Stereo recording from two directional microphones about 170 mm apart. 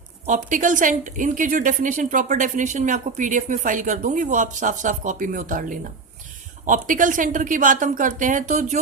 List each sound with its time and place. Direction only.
0.3 s a woman's voice: 50° right (ahead or behind)